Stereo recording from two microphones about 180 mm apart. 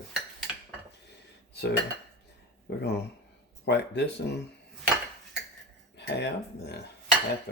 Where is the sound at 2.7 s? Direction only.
65° left (ahead or behind).